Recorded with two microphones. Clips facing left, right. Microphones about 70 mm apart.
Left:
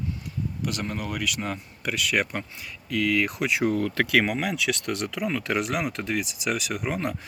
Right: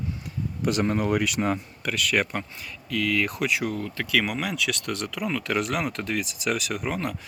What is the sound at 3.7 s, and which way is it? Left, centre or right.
Speech, left.